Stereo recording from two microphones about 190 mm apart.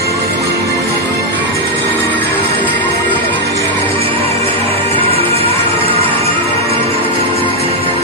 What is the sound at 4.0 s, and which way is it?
Music, 30° right (ahead or behind).